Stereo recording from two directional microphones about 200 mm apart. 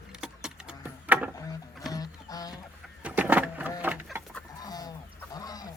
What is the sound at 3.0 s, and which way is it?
Vehicle, 10° right (ahead or behind).